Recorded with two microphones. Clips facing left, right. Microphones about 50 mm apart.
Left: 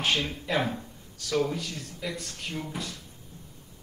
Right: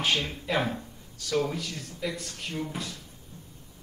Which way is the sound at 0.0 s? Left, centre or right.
Left.